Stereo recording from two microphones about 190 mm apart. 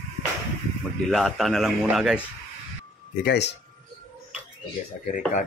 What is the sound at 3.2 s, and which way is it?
Speech, 60° left (ahead or behind).